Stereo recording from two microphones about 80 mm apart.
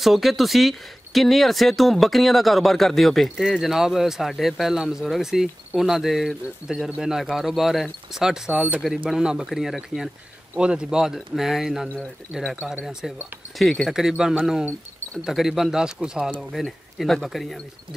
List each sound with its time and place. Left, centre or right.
0.0 s speech: centre
8.5 s speech: right
9.1 s speech: centre
13.6 s speech: centre
16.6 s speech: centre